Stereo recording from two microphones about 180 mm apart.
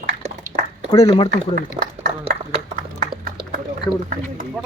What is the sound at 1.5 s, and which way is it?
Speech, 60° right (ahead or behind).